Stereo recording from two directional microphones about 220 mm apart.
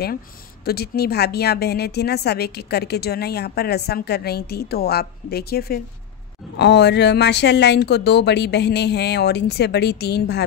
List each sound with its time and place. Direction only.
0.7 s a woman's voice: 45° left (ahead or behind)